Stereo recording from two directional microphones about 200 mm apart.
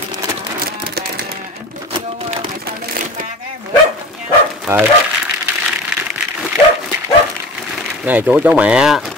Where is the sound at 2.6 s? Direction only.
45° right (ahead or behind).